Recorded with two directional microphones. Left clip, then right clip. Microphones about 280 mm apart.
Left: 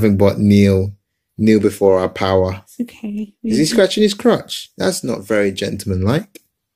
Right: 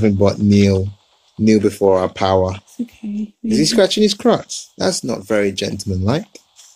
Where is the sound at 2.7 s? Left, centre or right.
Centre.